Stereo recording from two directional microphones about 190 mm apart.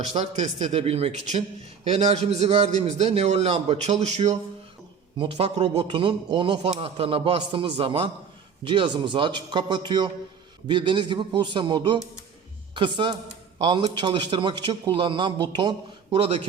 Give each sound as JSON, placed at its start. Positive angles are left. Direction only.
{"t": 0.1, "sound": "a man's voice", "side_deg": -35}
{"t": 13.6, "sound": "a man's voice", "side_deg": -25}